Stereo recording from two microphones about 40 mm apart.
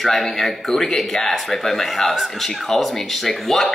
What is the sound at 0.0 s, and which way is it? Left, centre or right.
Speech, centre.